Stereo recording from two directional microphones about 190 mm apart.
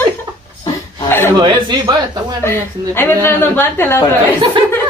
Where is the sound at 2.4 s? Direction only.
10° left (ahead or behind).